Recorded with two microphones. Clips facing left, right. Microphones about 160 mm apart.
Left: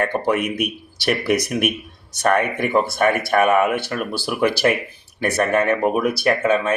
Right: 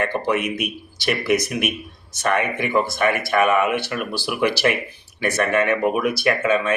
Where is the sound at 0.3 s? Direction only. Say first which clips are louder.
Left 2 dB; 50° left (ahead or behind).